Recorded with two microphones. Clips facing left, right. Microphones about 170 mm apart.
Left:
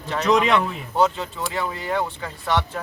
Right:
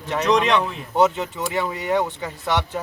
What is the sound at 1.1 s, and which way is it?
Speech, 20° right (ahead or behind).